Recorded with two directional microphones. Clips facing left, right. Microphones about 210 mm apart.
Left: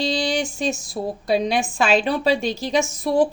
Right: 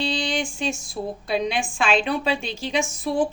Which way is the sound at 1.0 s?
50° left (ahead or behind).